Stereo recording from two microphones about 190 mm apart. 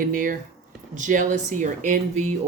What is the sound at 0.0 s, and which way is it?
Speech, 45° right (ahead or behind).